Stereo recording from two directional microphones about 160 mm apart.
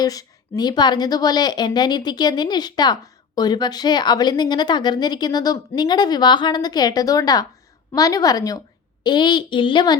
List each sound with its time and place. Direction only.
0.0 s a woman's voice: 20° left (ahead or behind)